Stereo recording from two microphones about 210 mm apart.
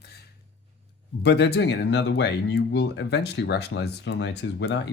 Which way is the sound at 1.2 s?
55° left (ahead or behind).